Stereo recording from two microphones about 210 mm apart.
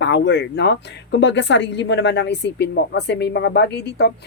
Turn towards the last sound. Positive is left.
turn(degrees=50)  # may be behind; listen again after turning